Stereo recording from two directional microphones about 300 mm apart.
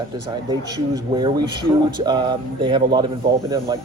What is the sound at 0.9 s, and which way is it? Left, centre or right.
Speech, centre.